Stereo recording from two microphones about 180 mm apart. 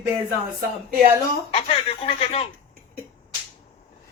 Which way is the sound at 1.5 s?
30° left (ahead or behind).